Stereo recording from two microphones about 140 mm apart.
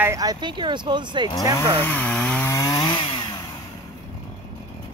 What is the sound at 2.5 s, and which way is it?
Chainsaw, 25° left (ahead or behind).